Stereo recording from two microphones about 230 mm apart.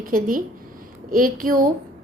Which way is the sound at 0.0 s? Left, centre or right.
Right.